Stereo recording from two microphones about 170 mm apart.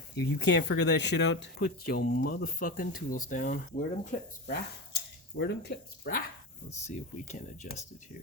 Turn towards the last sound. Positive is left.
turn(degrees=45)  # may be behind; listen again after turning